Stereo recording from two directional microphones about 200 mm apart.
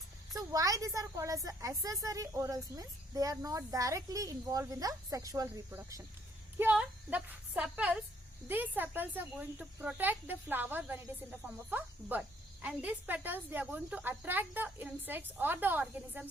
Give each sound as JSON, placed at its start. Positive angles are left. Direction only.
{"t": 0.3, "sound": "a woman's voice", "side_deg": -15}